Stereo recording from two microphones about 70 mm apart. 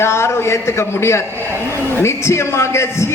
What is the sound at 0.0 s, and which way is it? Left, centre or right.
A man's voice, left.